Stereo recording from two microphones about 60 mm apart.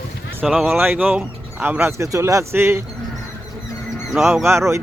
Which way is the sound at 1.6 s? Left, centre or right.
Right.